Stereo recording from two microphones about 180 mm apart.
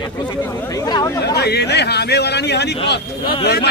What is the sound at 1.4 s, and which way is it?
A man's voice, 65° left (ahead or behind).